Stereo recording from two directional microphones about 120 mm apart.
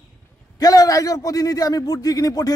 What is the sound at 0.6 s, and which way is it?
A man's voice, 30° left (ahead or behind).